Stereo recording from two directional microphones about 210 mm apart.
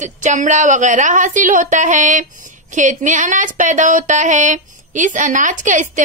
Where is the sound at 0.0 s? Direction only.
35° right (ahead or behind).